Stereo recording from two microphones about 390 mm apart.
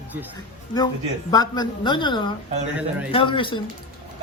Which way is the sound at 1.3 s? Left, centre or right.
Centre.